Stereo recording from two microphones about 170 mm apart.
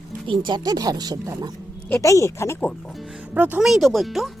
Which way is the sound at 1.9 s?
20° left (ahead or behind).